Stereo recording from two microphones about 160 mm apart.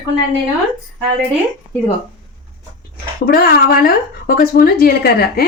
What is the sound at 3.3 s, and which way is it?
Speech, 70° left (ahead or behind).